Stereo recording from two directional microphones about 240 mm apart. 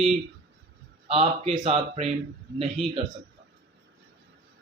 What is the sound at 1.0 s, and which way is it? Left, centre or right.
Speech, right.